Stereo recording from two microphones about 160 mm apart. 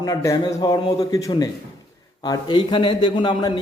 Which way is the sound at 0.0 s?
20° left (ahead or behind).